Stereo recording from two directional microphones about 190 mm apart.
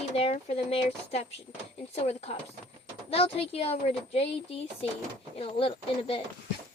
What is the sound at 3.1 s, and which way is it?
Speech, 30° left (ahead or behind).